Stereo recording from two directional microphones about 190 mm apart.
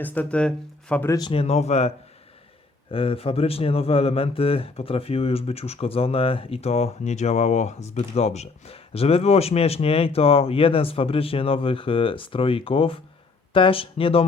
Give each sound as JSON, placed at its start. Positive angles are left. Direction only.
{"t": 0.0, "sound": "speech", "side_deg": 10}
{"t": 1.3, "sound": "speech", "side_deg": 30}
{"t": 2.9, "sound": "speech", "side_deg": 30}